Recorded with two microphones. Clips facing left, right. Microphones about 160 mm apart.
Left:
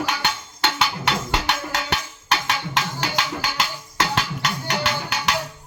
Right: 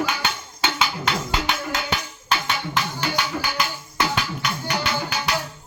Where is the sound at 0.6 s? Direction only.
70° left (ahead or behind).